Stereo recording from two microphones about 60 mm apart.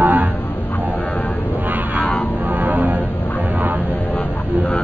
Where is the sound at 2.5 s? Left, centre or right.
Right.